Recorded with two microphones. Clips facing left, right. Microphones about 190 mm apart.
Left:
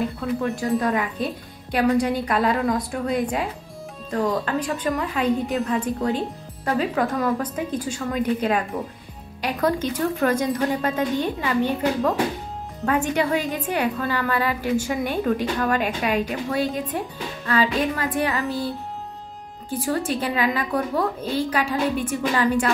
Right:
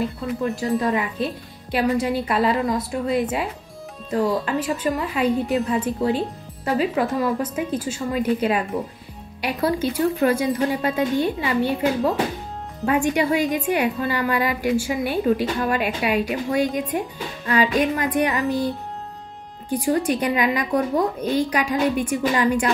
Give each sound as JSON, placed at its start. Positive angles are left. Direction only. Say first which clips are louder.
{"t": 0.4, "sound": "a woman's voice", "louder": "right 1 dB", "side_deg": 0}
{"t": 19.7, "sound": "speech", "louder": "right 4 dB", "side_deg": -15}